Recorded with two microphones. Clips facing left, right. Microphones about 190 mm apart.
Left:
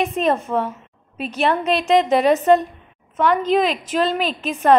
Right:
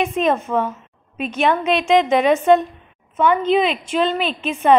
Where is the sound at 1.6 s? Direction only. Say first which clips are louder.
Right 1 dB; 35° left (ahead or behind).